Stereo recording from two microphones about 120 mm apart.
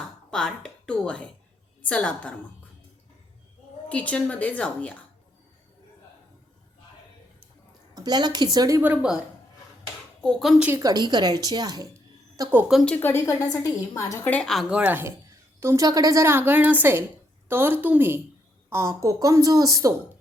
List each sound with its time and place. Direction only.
0.3 s a woman's voice: 5° left (ahead or behind)
3.8 s a woman's voice: 10° left (ahead or behind)
7.9 s a woman's voice: 35° right (ahead or behind)
8.8 s a woman's voice: 10° right (ahead or behind)
10.2 s speech: 5° left (ahead or behind)
10.8 s speech: 30° right (ahead or behind)
12.5 s a woman's voice: 15° right (ahead or behind)
12.8 s a woman's voice: 15° left (ahead or behind)
14.3 s speech: 5° left (ahead or behind)
14.7 s a woman's voice: 10° right (ahead or behind)
15.6 s a woman's voice: 25° right (ahead or behind)